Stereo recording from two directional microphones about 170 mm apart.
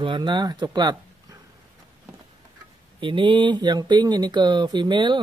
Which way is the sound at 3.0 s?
30° right (ahead or behind).